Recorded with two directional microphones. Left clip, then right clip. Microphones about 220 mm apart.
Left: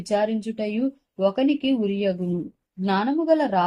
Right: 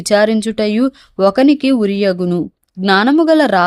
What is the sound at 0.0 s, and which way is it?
Speech, 45° right (ahead or behind).